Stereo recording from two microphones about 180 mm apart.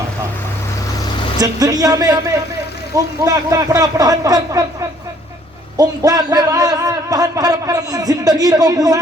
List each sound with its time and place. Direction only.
1.4 s a man's voice: 20° right (ahead or behind)
5.7 s a man's voice: 20° right (ahead or behind)